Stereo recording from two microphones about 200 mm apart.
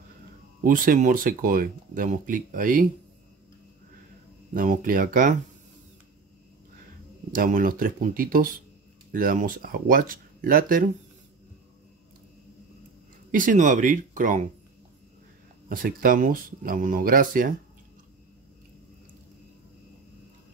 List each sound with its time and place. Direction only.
0.7 s speech: 45° right (ahead or behind)
4.6 s speech: 45° right (ahead or behind)
7.3 s speech: 45° right (ahead or behind)
13.3 s speech: 40° right (ahead or behind)
15.7 s speech: 45° right (ahead or behind)